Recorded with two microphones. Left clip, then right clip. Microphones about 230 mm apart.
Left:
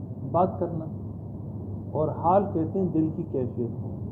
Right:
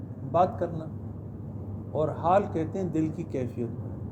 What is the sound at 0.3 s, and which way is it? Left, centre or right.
Speech, right.